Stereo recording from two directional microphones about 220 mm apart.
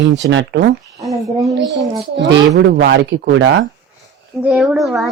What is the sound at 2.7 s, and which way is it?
Speech, 50° right (ahead or behind).